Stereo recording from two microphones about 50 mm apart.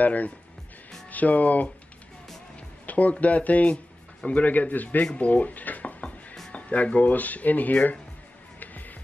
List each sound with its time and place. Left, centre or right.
0.0 s speech: left
2.9 s speech: left
3.7 s music: centre
4.4 s speech: left
6.0 s music: centre
6.5 s speech: left
8.5 s music: left